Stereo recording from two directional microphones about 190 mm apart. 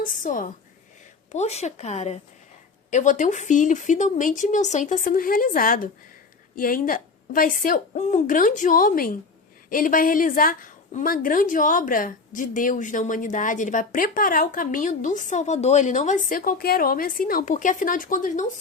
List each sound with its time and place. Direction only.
0.0 s a woman's voice: 45° left (ahead or behind)